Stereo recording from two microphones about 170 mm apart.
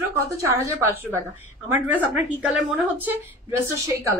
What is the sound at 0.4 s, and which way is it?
A woman's voice, 15° right (ahead or behind).